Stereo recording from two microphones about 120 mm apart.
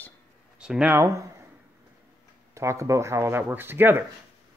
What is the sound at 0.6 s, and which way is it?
Speech, 5° right (ahead or behind).